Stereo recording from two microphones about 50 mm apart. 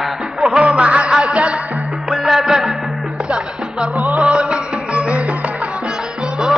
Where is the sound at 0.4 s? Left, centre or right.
Right.